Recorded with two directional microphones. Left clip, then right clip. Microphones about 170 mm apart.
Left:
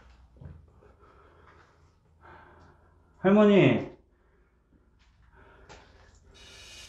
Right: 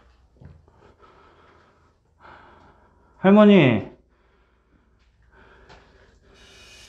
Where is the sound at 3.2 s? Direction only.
50° right (ahead or behind).